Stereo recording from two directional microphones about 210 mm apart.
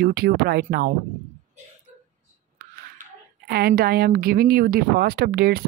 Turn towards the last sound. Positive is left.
turn(degrees=-45)  # may be behind; listen again after turning